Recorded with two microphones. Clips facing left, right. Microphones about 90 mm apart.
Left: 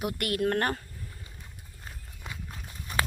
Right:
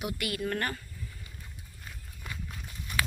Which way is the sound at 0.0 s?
55° left (ahead or behind).